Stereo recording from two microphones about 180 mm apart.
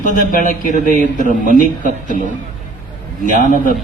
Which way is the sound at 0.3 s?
50° left (ahead or behind).